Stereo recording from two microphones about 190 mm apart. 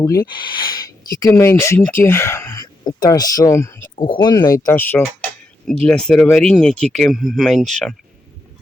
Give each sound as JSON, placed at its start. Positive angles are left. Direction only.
{"t": 0.0, "sound": "speech", "side_deg": 15}